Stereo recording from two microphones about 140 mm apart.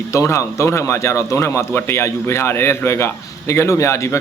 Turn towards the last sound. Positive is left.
turn(degrees=20)  # may be behind; listen again after turning